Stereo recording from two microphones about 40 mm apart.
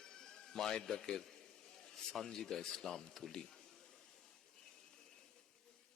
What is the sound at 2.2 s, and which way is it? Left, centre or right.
A man's voice, centre.